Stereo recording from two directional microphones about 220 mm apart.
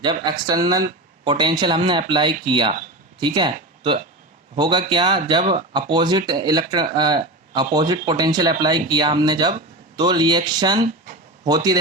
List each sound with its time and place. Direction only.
0.0 s a man's voice: 20° right (ahead or behind)